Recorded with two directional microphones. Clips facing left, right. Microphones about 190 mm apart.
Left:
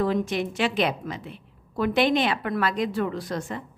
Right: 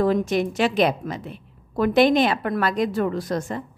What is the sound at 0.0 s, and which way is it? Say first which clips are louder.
A woman's voice: right 4 dB; 45° right (ahead or behind).